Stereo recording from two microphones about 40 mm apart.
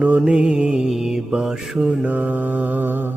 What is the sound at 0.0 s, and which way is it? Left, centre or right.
Music, right.